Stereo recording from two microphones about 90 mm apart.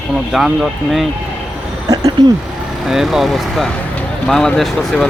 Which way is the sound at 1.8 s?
40° right (ahead or behind).